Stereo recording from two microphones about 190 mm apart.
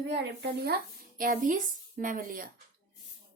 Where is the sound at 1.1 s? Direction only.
45° right (ahead or behind).